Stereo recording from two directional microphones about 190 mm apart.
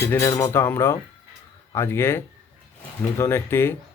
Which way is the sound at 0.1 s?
15° left (ahead or behind).